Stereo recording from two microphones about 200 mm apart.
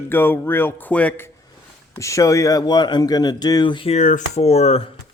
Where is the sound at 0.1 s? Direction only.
10° left (ahead or behind).